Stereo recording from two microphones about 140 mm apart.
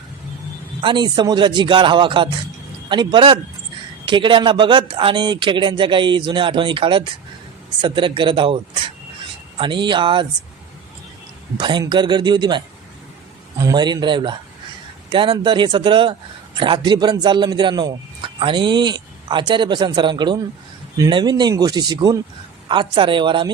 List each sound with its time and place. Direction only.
0.8 s a man's voice: 35° right (ahead or behind)
11.5 s a man's voice: 30° right (ahead or behind)